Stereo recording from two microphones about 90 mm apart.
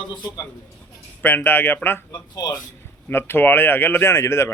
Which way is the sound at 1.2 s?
25° left (ahead or behind).